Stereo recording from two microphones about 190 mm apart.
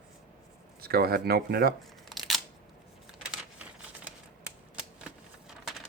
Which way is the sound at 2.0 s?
Centre (ahead or behind).